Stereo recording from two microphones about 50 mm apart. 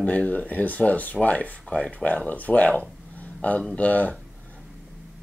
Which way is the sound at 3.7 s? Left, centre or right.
Left.